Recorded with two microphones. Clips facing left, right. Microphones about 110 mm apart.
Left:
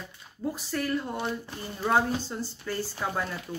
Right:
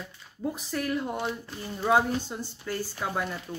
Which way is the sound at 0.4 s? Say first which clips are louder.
Even; 20° right (ahead or behind).